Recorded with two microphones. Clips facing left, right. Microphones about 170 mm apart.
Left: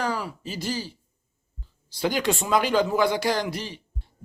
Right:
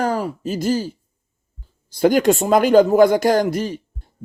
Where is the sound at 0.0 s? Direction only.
45° right (ahead or behind).